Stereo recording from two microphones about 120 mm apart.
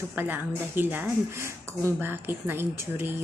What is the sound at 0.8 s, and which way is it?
A woman's voice, 20° right (ahead or behind).